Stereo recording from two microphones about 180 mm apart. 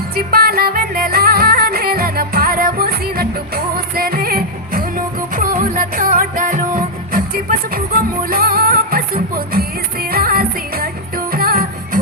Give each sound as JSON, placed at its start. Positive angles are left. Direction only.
{"t": 0.2, "sound": "music", "side_deg": -55}